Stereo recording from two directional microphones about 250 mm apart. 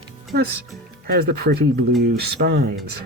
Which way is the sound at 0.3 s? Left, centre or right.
Right.